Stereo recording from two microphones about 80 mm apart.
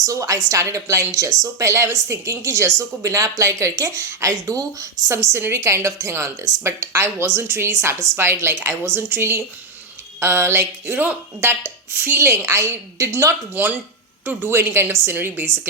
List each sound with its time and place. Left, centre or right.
0.0 s a woman's voice: right
5.1 s a woman's voice: right
13.5 s a woman's voice: right